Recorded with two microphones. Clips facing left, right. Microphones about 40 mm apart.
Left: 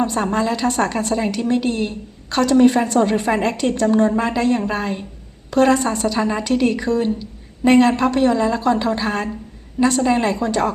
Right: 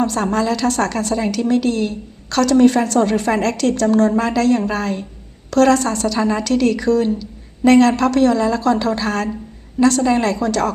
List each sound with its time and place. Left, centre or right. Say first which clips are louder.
0.0 s a woman's voice: right 1 dB; centre